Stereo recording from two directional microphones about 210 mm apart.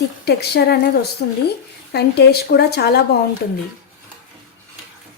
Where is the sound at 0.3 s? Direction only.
50° left (ahead or behind).